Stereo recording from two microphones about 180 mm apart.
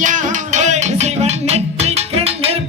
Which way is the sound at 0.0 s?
45° right (ahead or behind).